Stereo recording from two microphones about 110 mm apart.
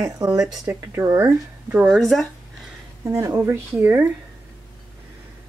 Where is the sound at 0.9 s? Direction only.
25° right (ahead or behind).